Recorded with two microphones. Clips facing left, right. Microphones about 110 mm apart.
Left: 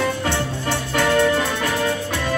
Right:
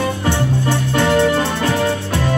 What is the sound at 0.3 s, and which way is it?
Music, 20° right (ahead or behind).